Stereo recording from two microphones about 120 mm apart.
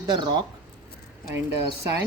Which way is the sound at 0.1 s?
40° right (ahead or behind).